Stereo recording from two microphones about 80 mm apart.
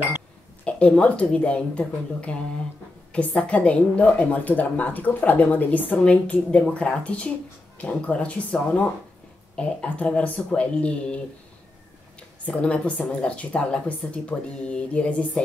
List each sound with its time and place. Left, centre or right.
0.7 s a woman's voice: centre
12.2 s speech: centre